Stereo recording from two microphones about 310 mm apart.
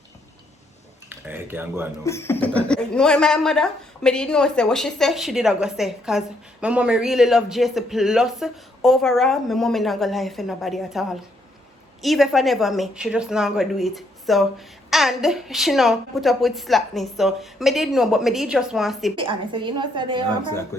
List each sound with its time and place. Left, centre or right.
1.1 s speech: centre
2.0 s speech: centre
19.1 s a woman's voice: centre